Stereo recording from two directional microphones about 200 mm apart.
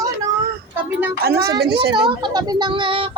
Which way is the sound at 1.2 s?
50° right (ahead or behind).